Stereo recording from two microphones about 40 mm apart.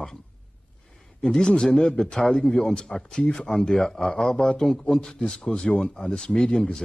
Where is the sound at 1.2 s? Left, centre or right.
Centre.